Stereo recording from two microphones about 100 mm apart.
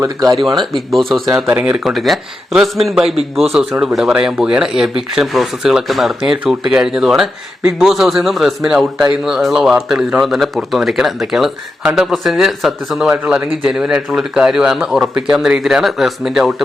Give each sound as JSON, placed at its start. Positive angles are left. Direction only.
{"t": 0.0, "sound": "speech", "side_deg": -35}
{"t": 0.9, "sound": "a man's voice", "side_deg": 0}
{"t": 1.5, "sound": "a man's voice", "side_deg": -10}